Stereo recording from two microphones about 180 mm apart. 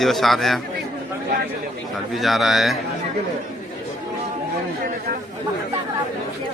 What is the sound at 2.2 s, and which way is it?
Speech, centre (ahead or behind).